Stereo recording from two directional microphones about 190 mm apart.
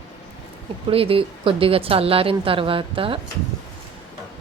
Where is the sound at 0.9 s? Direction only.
30° right (ahead or behind).